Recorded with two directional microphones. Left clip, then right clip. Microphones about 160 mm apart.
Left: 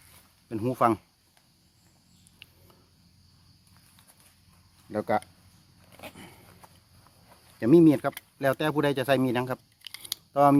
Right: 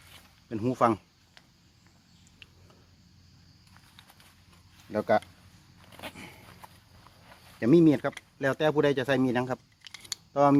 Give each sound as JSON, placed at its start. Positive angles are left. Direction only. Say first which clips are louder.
{"t": 0.5, "sound": "speech", "louder": "left 1 dB", "side_deg": 25}
{"t": 2.4, "sound": "a sound", "louder": "left 1 dB", "side_deg": 25}
{"t": 4.9, "sound": "speech", "louder": "right 2 dB", "side_deg": 20}
{"t": 5.9, "sound": "a sound", "louder": "right 2 dB", "side_deg": -20}
{"t": 7.6, "sound": "speech", "louder": "left 2 dB", "side_deg": 25}
{"t": 9.8, "sound": "chewing", "louder": "left 2 dB", "side_deg": 10}
{"t": 10.3, "sound": "speech", "louder": "left 2 dB", "side_deg": 25}